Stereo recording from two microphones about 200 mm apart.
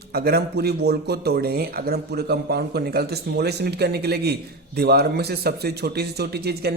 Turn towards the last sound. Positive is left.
turn(degrees=-55)  # may be behind; listen again after turning